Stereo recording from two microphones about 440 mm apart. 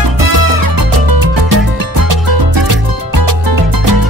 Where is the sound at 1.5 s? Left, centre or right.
Right.